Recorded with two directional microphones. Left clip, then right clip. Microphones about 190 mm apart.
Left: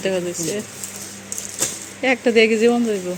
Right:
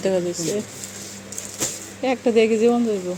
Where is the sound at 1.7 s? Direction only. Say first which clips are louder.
Left 4 dB; centre (ahead or behind).